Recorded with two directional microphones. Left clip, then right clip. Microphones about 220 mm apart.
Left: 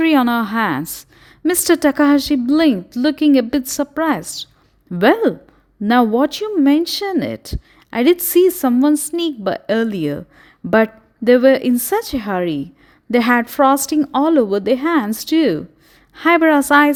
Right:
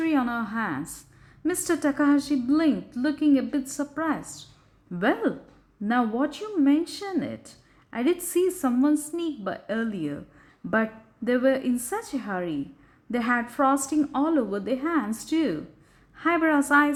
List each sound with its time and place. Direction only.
0.0 s speech: 45° left (ahead or behind)